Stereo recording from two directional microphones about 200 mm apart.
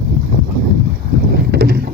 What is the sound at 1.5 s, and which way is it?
Boat, 50° right (ahead or behind).